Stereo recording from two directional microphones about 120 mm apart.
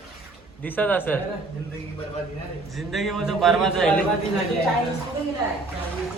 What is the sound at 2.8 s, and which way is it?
A man's voice, centre (ahead or behind).